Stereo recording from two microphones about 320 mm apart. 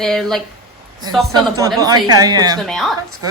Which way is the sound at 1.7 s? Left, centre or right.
Centre.